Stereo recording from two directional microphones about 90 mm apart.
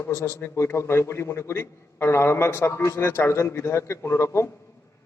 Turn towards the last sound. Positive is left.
turn(degrees=30)  # may be behind; listen again after turning